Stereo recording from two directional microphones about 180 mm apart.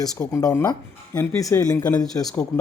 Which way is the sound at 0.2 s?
15° left (ahead or behind).